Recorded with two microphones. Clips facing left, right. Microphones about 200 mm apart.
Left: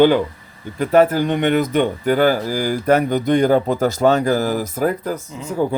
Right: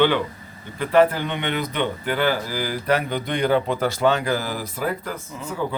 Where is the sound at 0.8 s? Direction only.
45° left (ahead or behind).